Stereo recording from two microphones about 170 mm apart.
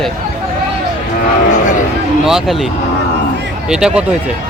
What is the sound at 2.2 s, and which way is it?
Speech, centre (ahead or behind).